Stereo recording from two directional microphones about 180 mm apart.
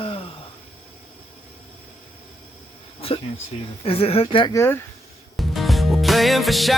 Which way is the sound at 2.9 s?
30° left (ahead or behind).